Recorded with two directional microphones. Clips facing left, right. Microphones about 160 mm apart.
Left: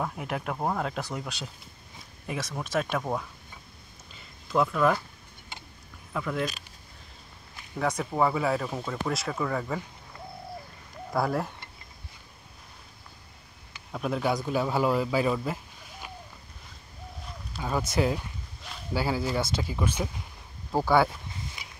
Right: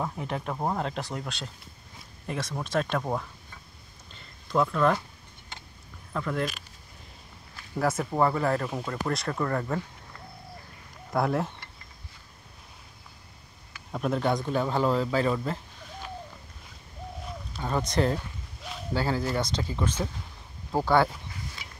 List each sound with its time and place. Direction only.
0.0 s speech: 5° left (ahead or behind)
4.1 s a sound: 5° left (ahead or behind)
5.5 s vehicle: 10° left (ahead or behind)
6.1 s speech: 5° left (ahead or behind)
7.7 s speech: 5° right (ahead or behind)
11.1 s speech: centre (ahead or behind)
13.9 s speech: centre (ahead or behind)
17.5 s a sound: 5° left (ahead or behind)
18.9 s speech: 10° left (ahead or behind)
21.6 s a sound: 15° left (ahead or behind)